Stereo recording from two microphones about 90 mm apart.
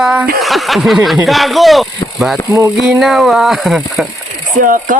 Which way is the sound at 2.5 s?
30° right (ahead or behind).